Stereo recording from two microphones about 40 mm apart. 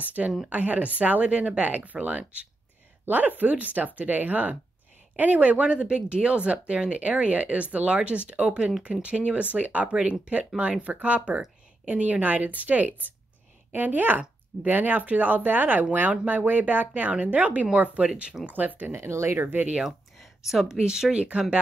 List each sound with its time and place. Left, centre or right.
0.0 s speech: right
1.3 s speech: right
18.5 s speech: right
18.9 s speech: right
19.3 s speech: right
20.7 s speech: centre